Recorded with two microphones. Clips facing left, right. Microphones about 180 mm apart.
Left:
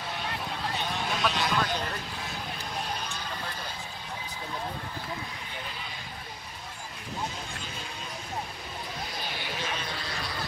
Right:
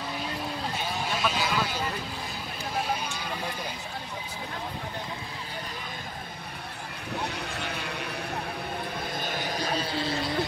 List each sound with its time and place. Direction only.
1.0 s a sound: centre (ahead or behind)
7.3 s vehicle: 65° right (ahead or behind)
9.1 s vehicle: 50° right (ahead or behind); by 10.3 s 30° right (ahead or behind)